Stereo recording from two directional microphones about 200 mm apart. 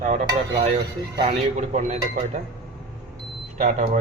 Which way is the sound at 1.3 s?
35° right (ahead or behind).